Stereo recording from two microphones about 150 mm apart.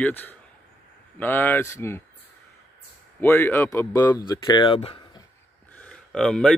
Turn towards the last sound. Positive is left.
turn(degrees=5)  # may be behind; listen again after turning